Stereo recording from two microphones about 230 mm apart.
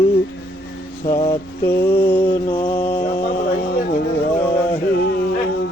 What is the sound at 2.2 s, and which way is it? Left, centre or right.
Mantra, left.